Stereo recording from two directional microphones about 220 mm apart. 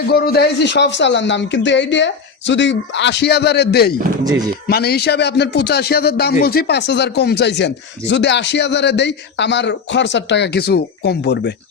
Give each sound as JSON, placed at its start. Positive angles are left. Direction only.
{"t": 0.1, "sound": "speech", "side_deg": 45}